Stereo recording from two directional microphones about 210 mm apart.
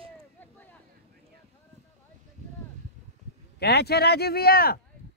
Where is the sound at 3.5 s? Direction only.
50° left (ahead or behind).